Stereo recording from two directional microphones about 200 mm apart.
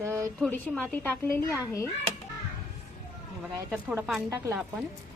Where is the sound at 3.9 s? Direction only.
5° right (ahead or behind).